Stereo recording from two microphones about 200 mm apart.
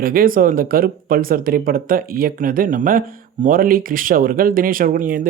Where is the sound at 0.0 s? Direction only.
45° right (ahead or behind).